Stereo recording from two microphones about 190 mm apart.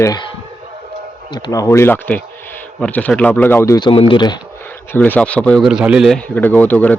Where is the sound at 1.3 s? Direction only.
20° left (ahead or behind).